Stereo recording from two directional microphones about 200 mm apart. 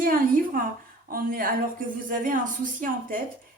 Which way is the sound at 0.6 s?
45° right (ahead or behind).